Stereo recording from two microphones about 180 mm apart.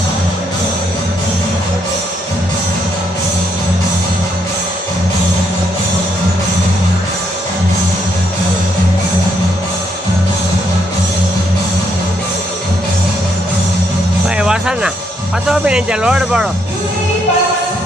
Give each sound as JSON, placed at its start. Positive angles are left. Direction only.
{"t": 14.3, "sound": "music", "side_deg": -5}
{"t": 15.4, "sound": "speech", "side_deg": -5}